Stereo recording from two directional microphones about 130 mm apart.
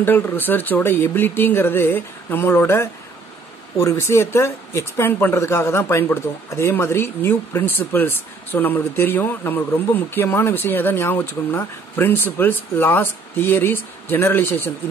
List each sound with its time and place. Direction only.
0.0 s speech: 15° left (ahead or behind)